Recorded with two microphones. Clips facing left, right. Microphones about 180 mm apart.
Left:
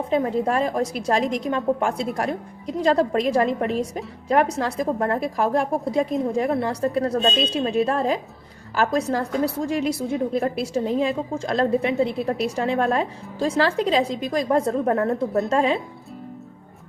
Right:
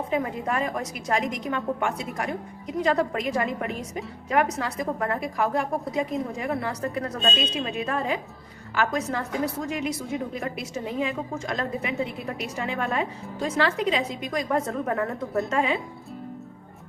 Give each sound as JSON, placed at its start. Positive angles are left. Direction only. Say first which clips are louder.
{"t": 0.1, "sound": "a woman's voice", "louder": "left 7 dB", "side_deg": 30}